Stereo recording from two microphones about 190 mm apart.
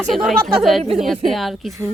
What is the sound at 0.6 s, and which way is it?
Speech, centre (ahead or behind).